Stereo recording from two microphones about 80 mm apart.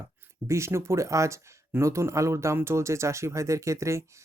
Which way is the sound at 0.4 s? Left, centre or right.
Right.